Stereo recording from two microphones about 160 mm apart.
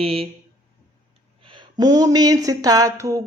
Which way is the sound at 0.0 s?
35° right (ahead or behind).